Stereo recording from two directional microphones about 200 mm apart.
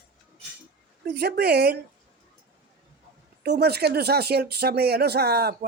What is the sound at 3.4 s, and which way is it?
Speech, 55° right (ahead or behind).